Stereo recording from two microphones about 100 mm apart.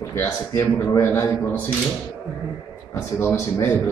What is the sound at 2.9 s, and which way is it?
A man's voice, 20° left (ahead or behind).